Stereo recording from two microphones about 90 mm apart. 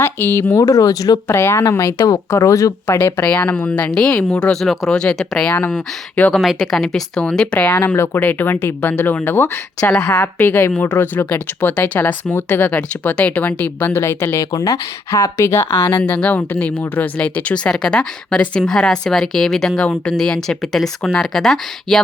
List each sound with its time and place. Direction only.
0.0 s a woman's voice: 25° left (ahead or behind); by 1.2 s 45° left (ahead or behind)
1.3 s a woman's voice: 30° left (ahead or behind)
2.8 s speech: 30° left (ahead or behind)
3.2 s speech: 15° left (ahead or behind)
6.3 s speech: centre (ahead or behind); by 9.9 s 25° left (ahead or behind)
9.9 s speech: 15° left (ahead or behind)
14.5 s speech: 40° left (ahead or behind); by 22.0 s 5° left (ahead or behind)